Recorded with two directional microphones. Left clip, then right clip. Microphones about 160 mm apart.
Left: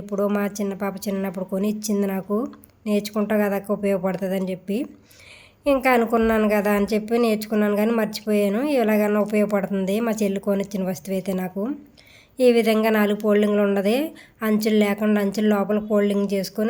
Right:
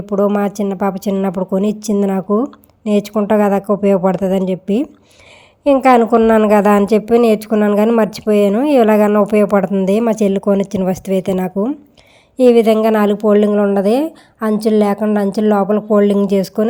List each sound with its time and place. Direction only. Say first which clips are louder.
0.2 s a woman's voice: right 8 dB; 40° right (ahead or behind)